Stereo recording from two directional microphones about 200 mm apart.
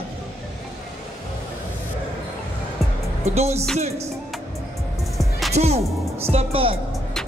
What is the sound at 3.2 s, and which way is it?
Music, 35° right (ahead or behind).